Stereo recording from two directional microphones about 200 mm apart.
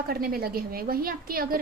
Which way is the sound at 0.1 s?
50° right (ahead or behind).